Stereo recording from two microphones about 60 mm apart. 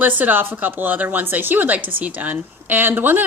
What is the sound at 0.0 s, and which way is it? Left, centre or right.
A woman's voice, right.